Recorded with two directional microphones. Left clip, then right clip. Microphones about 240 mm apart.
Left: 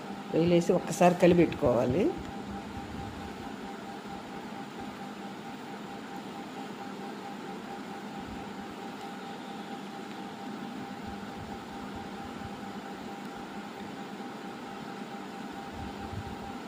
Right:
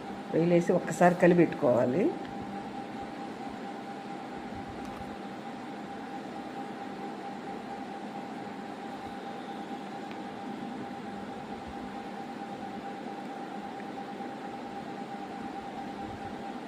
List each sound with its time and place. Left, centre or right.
0.3 s speech: centre